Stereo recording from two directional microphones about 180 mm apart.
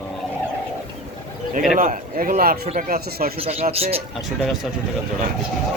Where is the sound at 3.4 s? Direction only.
35° right (ahead or behind).